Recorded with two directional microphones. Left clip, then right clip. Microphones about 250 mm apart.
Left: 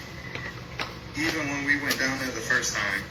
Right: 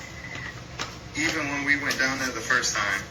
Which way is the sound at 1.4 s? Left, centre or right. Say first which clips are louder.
Right 1 dB; centre.